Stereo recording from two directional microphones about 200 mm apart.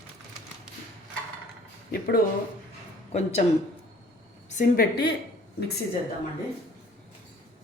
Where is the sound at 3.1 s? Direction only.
35° left (ahead or behind).